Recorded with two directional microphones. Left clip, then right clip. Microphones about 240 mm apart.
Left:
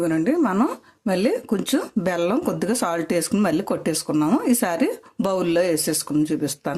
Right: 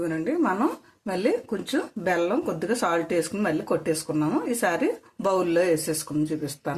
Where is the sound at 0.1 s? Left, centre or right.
Left.